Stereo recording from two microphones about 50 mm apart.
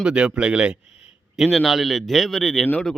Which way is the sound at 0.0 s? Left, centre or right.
Centre.